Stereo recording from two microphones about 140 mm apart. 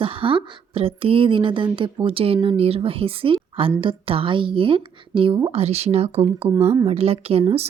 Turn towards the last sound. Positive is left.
turn(degrees=-45)  # may be behind; listen again after turning